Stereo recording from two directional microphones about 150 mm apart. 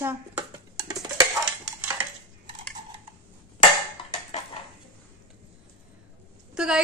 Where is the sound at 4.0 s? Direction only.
35° left (ahead or behind).